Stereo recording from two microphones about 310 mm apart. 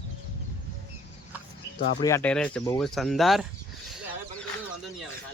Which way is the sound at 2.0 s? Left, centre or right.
Centre.